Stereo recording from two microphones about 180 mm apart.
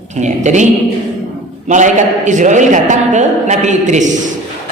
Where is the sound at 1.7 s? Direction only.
45° right (ahead or behind).